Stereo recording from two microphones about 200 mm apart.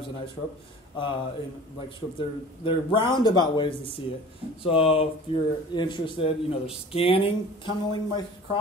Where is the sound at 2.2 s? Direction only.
25° left (ahead or behind).